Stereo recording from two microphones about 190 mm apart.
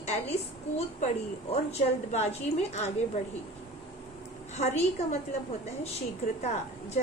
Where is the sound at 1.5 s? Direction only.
35° left (ahead or behind).